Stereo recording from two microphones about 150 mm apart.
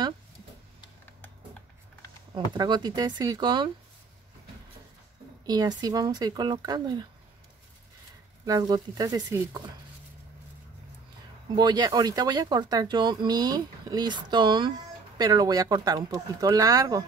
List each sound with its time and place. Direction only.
2.5 s speech: 30° right (ahead or behind)
5.5 s speech: 25° right (ahead or behind)
8.5 s speech: 25° right (ahead or behind)
11.5 s speech: 25° right (ahead or behind)